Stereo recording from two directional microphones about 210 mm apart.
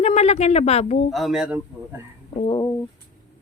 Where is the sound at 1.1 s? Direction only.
Centre (ahead or behind).